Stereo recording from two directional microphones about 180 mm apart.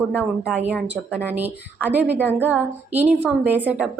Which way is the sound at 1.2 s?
10° right (ahead or behind).